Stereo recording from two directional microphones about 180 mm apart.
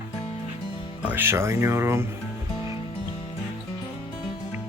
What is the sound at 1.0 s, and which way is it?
Speech, 10° right (ahead or behind).